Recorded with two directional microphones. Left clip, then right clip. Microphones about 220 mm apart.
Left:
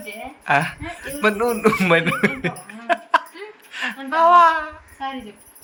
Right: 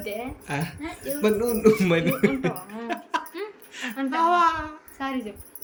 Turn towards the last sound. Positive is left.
turn(degrees=-10)  # may be behind; listen again after turning